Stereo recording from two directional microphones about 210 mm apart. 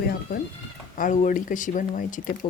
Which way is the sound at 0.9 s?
35° left (ahead or behind).